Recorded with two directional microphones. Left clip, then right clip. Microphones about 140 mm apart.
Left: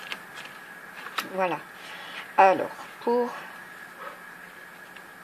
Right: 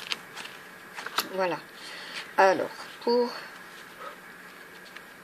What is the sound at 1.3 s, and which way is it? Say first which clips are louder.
Speech: left 5 dB; 20° left (ahead or behind).